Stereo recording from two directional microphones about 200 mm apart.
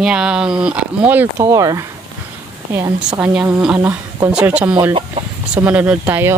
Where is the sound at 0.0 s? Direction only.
5° right (ahead or behind).